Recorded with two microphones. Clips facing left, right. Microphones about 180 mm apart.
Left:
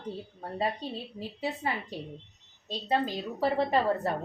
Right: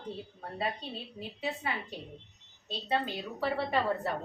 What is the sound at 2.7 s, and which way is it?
A woman's voice, 35° left (ahead or behind).